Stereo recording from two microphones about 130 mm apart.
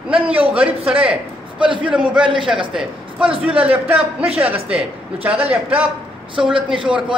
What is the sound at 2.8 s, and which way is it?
A man's voice, 10° right (ahead or behind).